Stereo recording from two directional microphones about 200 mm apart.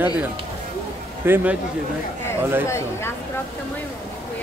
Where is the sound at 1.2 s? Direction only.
10° right (ahead or behind).